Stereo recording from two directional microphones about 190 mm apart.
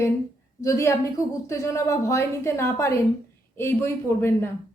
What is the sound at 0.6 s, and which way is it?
Speech, 15° left (ahead or behind).